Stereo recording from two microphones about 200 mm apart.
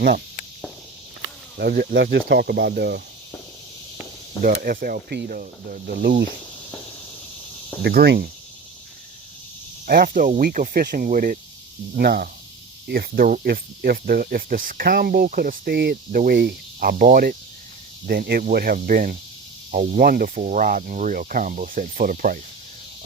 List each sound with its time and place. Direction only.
1.5 s speech: 55° right (ahead or behind)
4.4 s speech: 45° right (ahead or behind)
7.8 s speech: 55° right (ahead or behind)
9.8 s speech: 45° right (ahead or behind)